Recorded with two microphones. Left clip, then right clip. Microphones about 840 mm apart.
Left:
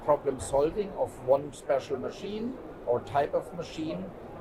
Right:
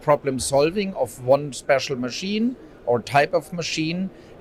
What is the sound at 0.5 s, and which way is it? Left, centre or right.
Speech, right.